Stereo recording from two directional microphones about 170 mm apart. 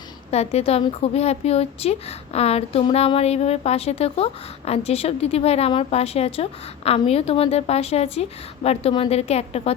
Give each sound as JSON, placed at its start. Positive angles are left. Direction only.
{"t": 0.3, "sound": "a woman's voice", "side_deg": 40}